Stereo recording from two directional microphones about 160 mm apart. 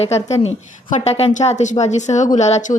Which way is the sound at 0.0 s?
40° left (ahead or behind).